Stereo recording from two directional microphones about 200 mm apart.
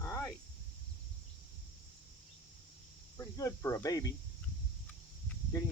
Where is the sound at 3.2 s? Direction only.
15° left (ahead or behind).